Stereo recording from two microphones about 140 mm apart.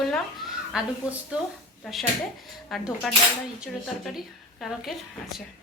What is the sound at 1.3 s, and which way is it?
A woman's voice, 10° right (ahead or behind).